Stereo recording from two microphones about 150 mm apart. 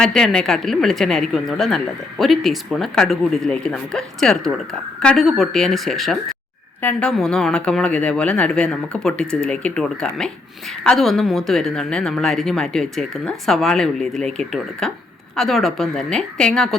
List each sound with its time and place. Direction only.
0.0 s a woman's voice: 5° left (ahead or behind)